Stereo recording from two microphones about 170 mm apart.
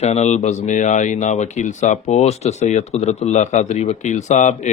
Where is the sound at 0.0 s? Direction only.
40° left (ahead or behind).